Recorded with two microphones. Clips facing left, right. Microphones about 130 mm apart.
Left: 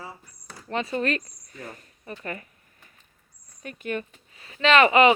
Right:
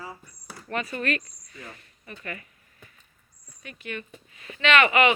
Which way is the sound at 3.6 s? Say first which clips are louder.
Left 6 dB; 45° left (ahead or behind).